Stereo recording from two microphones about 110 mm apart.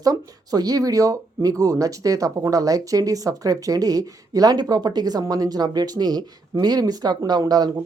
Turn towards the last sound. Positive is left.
turn(degrees=-35)  # may be behind; listen again after turning